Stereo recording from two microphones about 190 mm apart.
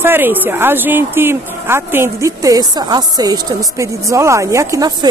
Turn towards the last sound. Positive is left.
turn(degrees=-20)  # may be behind; listen again after turning